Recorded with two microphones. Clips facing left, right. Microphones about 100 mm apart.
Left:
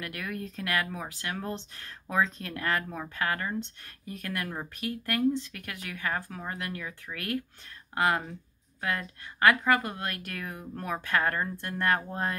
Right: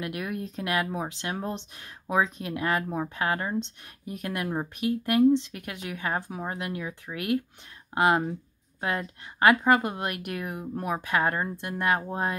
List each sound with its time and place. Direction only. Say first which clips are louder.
0.0 s speech: right 4 dB; 20° right (ahead or behind)